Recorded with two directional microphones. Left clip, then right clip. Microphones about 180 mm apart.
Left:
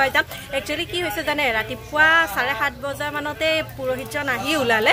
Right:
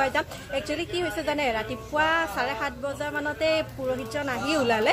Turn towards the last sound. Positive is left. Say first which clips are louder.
# left 4 dB
turn(degrees=5)  # may be behind; listen again after turning